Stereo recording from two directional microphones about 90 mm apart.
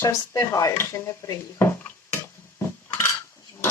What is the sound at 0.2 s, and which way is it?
Speech, 40° left (ahead or behind).